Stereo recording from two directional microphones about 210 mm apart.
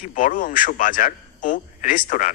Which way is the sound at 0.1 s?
40° left (ahead or behind).